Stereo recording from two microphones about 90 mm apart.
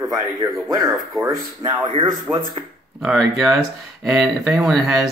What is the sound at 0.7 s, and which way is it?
Speech, 40° right (ahead or behind).